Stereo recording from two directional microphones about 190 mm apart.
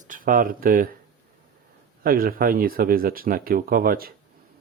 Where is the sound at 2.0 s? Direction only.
50° right (ahead or behind).